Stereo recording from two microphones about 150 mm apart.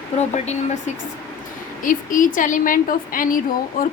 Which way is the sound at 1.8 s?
65° left (ahead or behind).